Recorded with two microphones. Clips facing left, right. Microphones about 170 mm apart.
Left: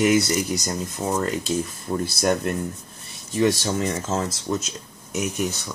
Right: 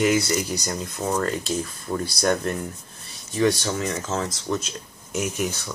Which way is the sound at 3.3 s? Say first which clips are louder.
Left 1 dB; 25° left (ahead or behind).